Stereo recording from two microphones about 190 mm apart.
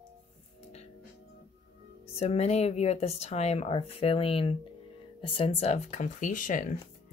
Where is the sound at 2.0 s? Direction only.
35° left (ahead or behind).